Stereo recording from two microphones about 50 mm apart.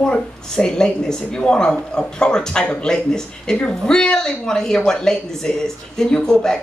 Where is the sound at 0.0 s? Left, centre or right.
Centre.